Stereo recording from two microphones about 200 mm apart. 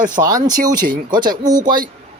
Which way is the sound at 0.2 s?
20° right (ahead or behind).